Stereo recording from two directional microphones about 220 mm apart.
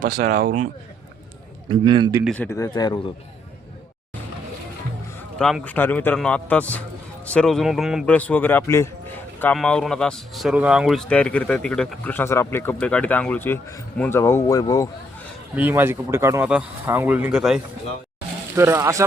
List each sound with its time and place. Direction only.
0.2 s speech: 45° right (ahead or behind)
1.6 s a man's voice: 20° right (ahead or behind)
2.2 s a man's voice: 5° left (ahead or behind)
5.4 s a man's voice: centre (ahead or behind)
15.5 s speech: 10° right (ahead or behind)